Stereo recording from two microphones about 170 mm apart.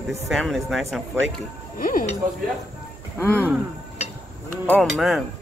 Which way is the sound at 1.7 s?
55° left (ahead or behind).